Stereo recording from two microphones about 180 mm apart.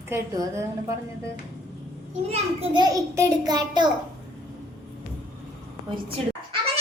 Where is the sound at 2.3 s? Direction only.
30° right (ahead or behind).